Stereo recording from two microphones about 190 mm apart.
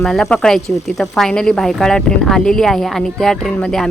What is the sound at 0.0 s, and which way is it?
A woman's voice, 5° left (ahead or behind).